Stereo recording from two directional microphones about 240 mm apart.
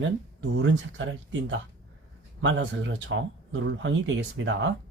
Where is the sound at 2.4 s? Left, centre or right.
Right.